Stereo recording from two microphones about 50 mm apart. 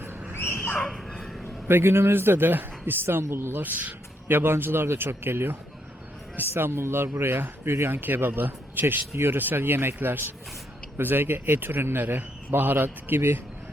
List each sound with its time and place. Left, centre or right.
0.3 s dog: left
0.9 s a sound: centre
1.6 s a man's voice: right
3.2 s speech: right
3.6 s a man's voice: right
7.9 s a man's voice: right
11.9 s a man's voice: right